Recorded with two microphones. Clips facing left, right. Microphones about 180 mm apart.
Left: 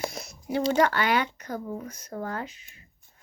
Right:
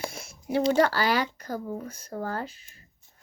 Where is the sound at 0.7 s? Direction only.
35° right (ahead or behind).